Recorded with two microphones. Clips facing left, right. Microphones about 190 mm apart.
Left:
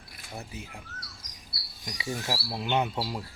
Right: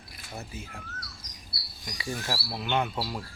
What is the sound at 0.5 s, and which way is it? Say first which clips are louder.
Speech: even; 15° left (ahead or behind).